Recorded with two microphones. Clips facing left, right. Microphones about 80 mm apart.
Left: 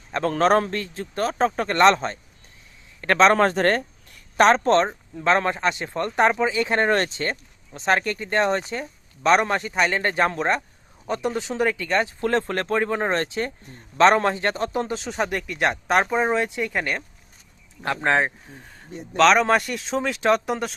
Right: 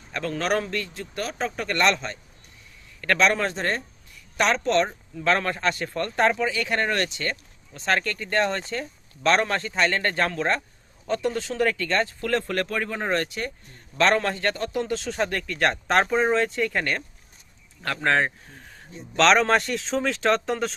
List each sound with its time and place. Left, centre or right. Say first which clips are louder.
0.1 s speech: left 7 dB; left
3.3 s a woman's voice: left 7 dB; left
4.9 s speech: left 3 dB; left